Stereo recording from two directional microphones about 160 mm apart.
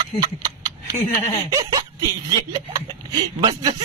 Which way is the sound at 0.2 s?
25° right (ahead or behind).